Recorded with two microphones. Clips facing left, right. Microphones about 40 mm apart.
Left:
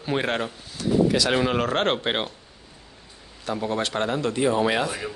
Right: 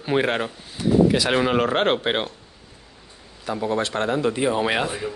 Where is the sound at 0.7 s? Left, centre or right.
Centre.